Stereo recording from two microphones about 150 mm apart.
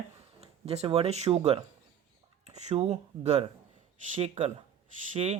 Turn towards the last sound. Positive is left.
turn(degrees=-50)  # may be behind; listen again after turning